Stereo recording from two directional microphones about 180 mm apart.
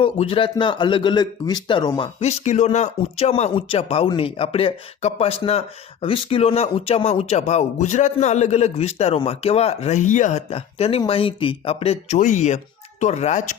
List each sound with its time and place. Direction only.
0.0 s a man's voice: 30° left (ahead or behind)